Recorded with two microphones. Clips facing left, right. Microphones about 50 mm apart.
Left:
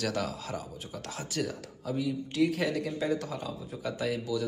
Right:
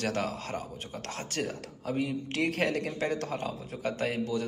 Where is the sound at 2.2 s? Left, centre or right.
Right.